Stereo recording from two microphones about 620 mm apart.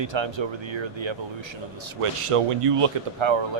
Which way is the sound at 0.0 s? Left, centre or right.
Right.